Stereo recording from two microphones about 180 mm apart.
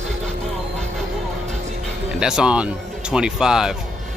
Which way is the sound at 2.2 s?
5° right (ahead or behind).